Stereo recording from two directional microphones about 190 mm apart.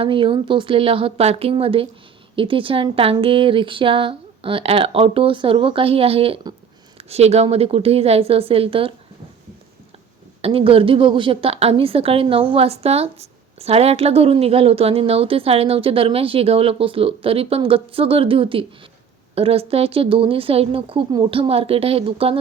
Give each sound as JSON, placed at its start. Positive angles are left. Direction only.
{"t": 0.0, "sound": "a woman's voice", "side_deg": -25}
{"t": 10.4, "sound": "a woman's voice", "side_deg": -30}